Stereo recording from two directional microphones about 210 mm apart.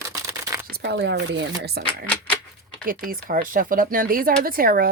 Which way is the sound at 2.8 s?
40° right (ahead or behind).